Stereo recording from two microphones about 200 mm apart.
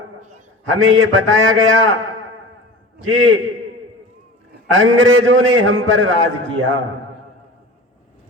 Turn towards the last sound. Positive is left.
turn(degrees=-80)